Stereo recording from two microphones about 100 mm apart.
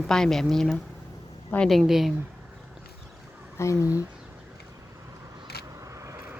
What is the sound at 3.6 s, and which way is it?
Speech, 30° left (ahead or behind).